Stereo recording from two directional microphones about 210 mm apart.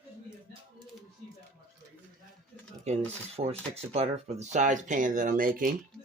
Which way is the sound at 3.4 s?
30° right (ahead or behind).